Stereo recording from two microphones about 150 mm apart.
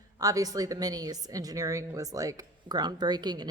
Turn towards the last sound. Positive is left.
turn(degrees=-30)  # may be behind; listen again after turning